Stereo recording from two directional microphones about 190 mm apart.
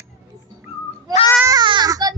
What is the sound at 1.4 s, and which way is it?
Goat, 20° right (ahead or behind).